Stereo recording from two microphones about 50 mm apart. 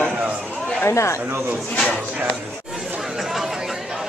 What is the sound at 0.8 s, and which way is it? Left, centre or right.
Speech, left.